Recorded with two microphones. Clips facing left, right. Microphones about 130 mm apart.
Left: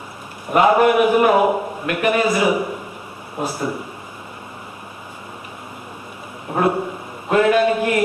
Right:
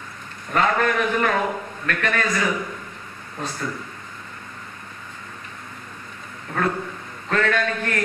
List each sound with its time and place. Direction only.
0.5 s a man's voice: 15° left (ahead or behind)
6.5 s a man's voice: 20° left (ahead or behind)